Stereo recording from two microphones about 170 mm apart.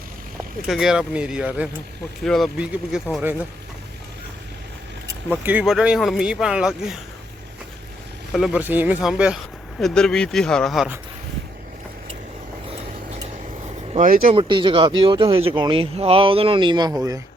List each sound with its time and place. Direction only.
0.7 s speech: 5° right (ahead or behind)
5.0 s speech: 10° right (ahead or behind)
8.3 s speech: centre (ahead or behind)
8.6 s speech: 10° right (ahead or behind)
14.3 s speech: 30° right (ahead or behind)